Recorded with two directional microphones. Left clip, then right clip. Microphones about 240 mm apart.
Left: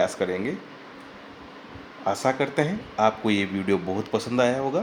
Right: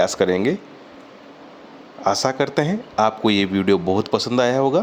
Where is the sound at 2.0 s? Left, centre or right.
Right.